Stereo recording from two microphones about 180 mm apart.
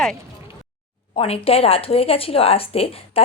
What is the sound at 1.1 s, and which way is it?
Speech, 30° left (ahead or behind).